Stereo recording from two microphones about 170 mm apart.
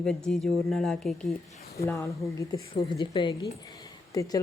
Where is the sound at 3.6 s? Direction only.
20° left (ahead or behind).